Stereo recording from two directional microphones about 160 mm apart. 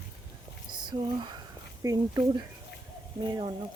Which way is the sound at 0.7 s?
30° right (ahead or behind).